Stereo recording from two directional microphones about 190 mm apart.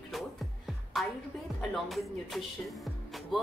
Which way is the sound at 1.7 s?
Centre (ahead or behind).